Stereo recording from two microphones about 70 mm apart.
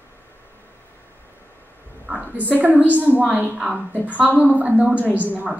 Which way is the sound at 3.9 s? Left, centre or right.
Right.